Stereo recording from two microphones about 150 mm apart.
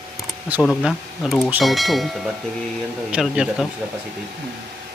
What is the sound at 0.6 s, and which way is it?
A man's voice, centre (ahead or behind).